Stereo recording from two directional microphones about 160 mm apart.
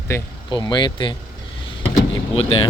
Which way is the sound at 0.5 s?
25° left (ahead or behind).